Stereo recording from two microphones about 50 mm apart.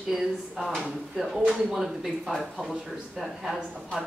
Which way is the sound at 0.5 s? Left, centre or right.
Centre.